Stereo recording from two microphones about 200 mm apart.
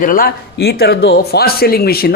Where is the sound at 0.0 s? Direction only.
45° left (ahead or behind).